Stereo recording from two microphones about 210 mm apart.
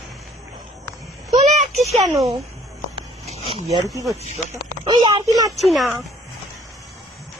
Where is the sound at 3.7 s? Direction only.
15° right (ahead or behind).